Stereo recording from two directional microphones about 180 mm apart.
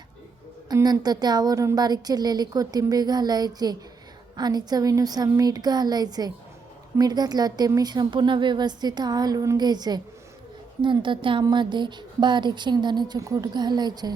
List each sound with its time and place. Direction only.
0.7 s a woman's voice: 20° right (ahead or behind)